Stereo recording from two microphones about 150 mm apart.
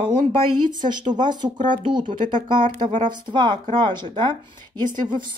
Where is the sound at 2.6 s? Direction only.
55° right (ahead or behind).